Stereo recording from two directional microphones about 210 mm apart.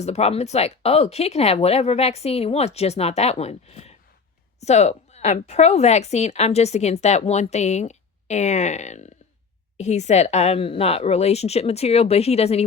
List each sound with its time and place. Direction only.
0.0 s a woman's voice: 30° left (ahead or behind)